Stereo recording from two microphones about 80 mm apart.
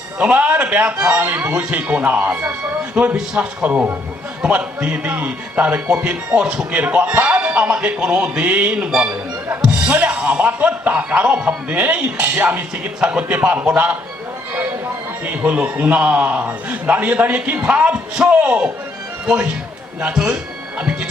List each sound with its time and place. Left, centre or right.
0.2 s speech: centre
15.2 s speech: centre